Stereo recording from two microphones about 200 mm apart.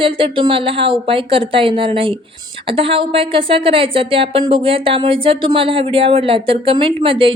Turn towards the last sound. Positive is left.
turn(degrees=-25)  # may be behind; listen again after turning